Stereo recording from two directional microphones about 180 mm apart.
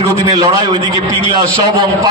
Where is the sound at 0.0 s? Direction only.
20° right (ahead or behind).